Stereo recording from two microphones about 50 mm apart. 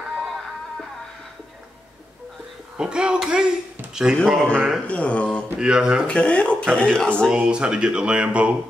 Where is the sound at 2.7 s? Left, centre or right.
Centre.